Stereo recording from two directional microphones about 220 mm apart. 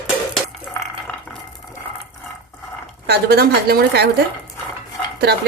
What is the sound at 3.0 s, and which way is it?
Speech, 45° right (ahead or behind).